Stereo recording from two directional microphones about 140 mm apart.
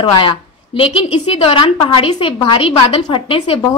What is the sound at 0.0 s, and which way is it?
A woman's voice, 35° left (ahead or behind).